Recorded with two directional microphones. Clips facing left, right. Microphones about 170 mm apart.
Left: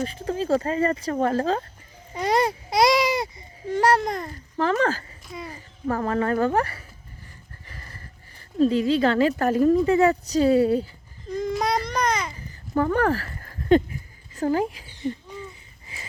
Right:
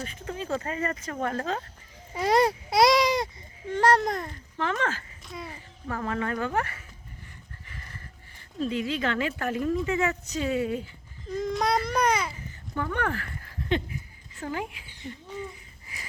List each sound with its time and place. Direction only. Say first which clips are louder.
0.0 s speech: left 8 dB; 35° left (ahead or behind)
2.1 s a child's voice: even; centre (ahead or behind)
4.5 s speech: left 7 dB; 35° left (ahead or behind)
5.2 s speech: left 3 dB; centre (ahead or behind)
5.5 s speech: left 11 dB; 40° left (ahead or behind)
11.3 s speech: left 2 dB; centre (ahead or behind)
11.9 s babbling: even; 10° right (ahead or behind)
12.7 s a sound: left 8 dB; 40° left (ahead or behind)
15.9 s a sound: left 2 dB; 25° left (ahead or behind)